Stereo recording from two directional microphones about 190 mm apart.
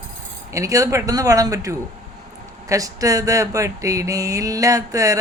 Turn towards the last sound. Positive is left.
turn(degrees=-15)  # may be behind; listen again after turning